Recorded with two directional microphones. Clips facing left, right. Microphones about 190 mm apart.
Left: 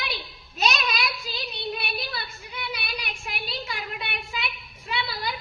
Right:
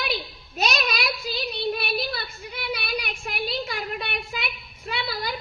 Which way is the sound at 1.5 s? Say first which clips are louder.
Right 5 dB; 50° right (ahead or behind).